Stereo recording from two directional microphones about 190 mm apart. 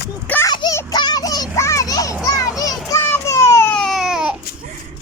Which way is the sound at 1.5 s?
15° left (ahead or behind).